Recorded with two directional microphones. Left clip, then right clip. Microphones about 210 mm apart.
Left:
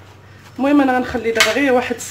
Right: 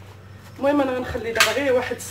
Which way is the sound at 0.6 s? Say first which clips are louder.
Left 6 dB; 50° left (ahead or behind).